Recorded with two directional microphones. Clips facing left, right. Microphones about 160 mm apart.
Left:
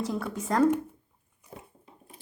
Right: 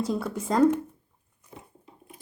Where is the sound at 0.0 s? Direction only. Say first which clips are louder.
Right 3 dB; 10° right (ahead or behind).